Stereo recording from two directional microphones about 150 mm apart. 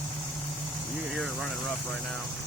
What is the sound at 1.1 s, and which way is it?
Speech, centre (ahead or behind).